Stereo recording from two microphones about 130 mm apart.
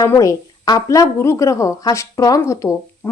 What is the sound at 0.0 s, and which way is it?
A woman's voice, 25° left (ahead or behind).